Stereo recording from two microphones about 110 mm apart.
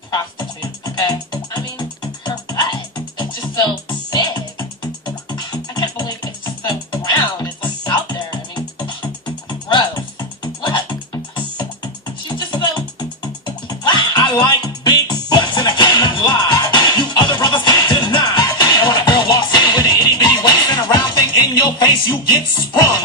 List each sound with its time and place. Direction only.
0.1 s music: 35° left (ahead or behind)